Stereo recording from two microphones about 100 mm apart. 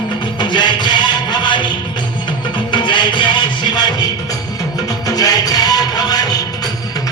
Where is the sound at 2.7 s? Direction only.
50° left (ahead or behind).